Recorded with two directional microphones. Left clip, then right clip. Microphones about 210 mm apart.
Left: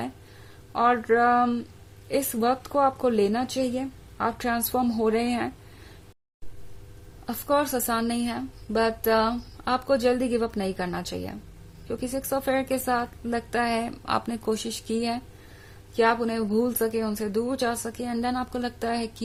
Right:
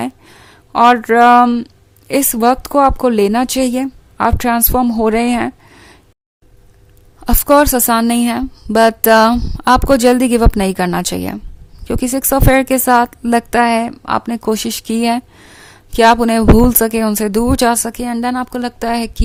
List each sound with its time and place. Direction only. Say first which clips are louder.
0.7 s a woman's voice: right 12 dB; 40° right (ahead or behind)
7.3 s a woman's voice: right 14 dB; 45° right (ahead or behind)